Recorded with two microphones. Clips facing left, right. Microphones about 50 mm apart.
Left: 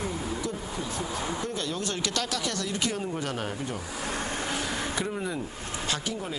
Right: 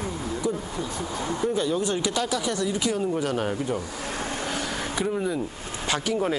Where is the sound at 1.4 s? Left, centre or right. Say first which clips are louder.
Right 7 dB; centre.